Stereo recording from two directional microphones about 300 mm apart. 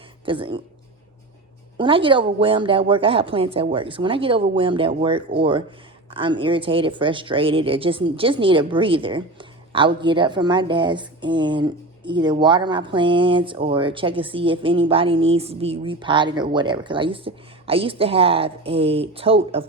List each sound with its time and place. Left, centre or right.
0.3 s a woman's voice: centre
1.8 s a woman's voice: centre